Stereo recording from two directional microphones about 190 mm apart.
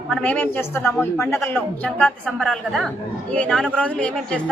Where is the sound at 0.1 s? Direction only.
5° left (ahead or behind).